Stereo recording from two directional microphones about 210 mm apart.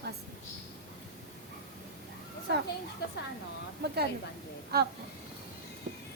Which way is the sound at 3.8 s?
50° right (ahead or behind).